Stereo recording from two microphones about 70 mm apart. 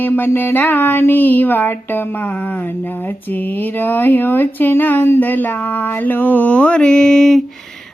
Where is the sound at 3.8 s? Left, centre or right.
Left; by 7.4 s centre.